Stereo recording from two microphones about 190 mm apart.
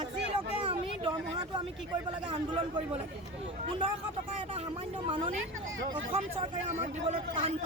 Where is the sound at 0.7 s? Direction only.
25° right (ahead or behind).